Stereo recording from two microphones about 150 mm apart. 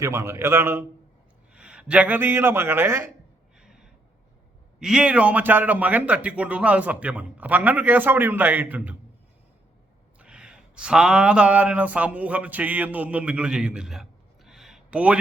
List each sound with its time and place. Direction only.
0.0 s speech: 20° right (ahead or behind)
3.6 s gasp: 5° right (ahead or behind)
4.8 s speech: 5° right (ahead or behind)
10.2 s speech: 5° right (ahead or behind)